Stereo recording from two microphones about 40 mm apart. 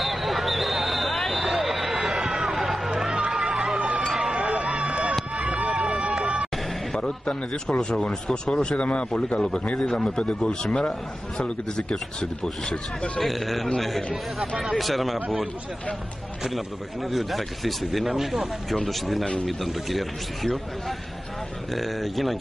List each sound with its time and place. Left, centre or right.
0.0 s vehicle: centre
3.3 s crowd: centre
4.2 s a sound: right
5.4 s run: right
6.2 s music: right
7.0 s a man's voice: centre
8.6 s a man's voice: left
9.8 s a man's voice: centre
13.2 s speech: centre
16.4 s speech: centre
21.7 s speech: centre